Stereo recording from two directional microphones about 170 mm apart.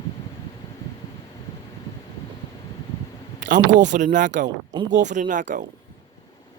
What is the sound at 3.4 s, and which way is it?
Speech, 50° right (ahead or behind).